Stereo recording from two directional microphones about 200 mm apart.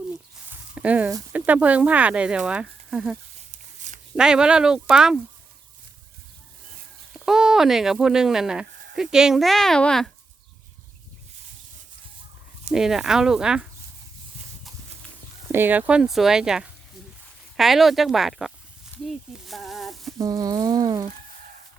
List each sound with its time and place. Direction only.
0.5 s speech: 5° right (ahead or behind)
3.5 s a sound: 35° right (ahead or behind)
4.2 s speech: 5° right (ahead or behind)
7.1 s speech: 5° right (ahead or behind)
12.7 s speech: centre (ahead or behind)
15.4 s speech: 10° right (ahead or behind)
18.9 s a sound: 10° left (ahead or behind)
20.1 s speech: 15° right (ahead or behind)